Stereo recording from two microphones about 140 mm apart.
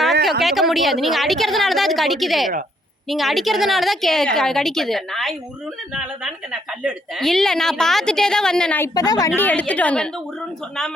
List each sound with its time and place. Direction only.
0.3 s a woman's voice: centre (ahead or behind)
8.8 s a woman's voice: 25° left (ahead or behind)
9.3 s a woman's voice: 15° left (ahead or behind)